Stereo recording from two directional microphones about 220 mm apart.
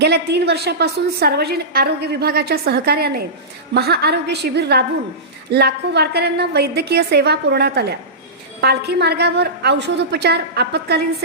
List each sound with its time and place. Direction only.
0.0 s a woman's voice: 50° right (ahead or behind)